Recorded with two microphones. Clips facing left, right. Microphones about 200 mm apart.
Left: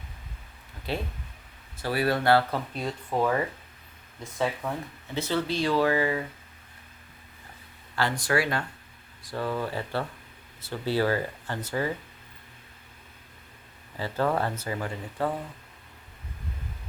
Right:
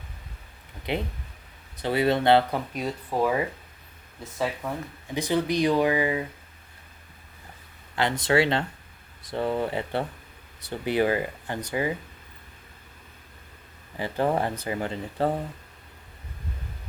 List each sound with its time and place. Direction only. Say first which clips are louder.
0.9 s speech: right 3 dB; 20° right (ahead or behind)
5.0 s speech: right 3 dB; 15° right (ahead or behind)
7.9 s speech: right 4 dB; 20° right (ahead or behind)
13.9 s speech: right 2 dB; 15° right (ahead or behind)